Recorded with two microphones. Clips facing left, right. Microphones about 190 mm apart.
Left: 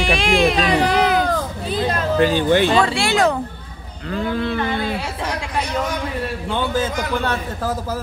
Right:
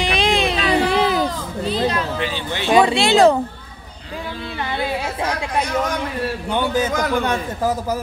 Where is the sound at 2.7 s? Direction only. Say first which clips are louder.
Right 3 dB; 20° right (ahead or behind).